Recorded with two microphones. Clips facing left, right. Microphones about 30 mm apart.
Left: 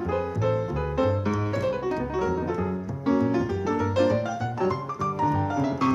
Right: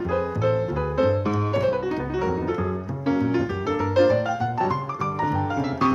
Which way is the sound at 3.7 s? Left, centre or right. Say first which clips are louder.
Right 4 dB; right.